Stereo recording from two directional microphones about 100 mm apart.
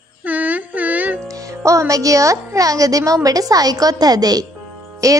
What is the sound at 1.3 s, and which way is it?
A woman's voice, 35° right (ahead or behind).